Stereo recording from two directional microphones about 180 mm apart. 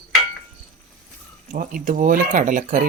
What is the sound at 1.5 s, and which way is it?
Speech, 45° right (ahead or behind).